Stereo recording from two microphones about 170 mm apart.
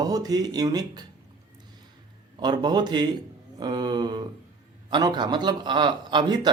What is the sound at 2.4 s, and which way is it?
Speech, 25° right (ahead or behind).